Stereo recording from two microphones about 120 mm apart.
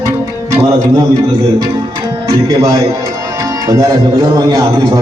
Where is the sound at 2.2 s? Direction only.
30° right (ahead or behind).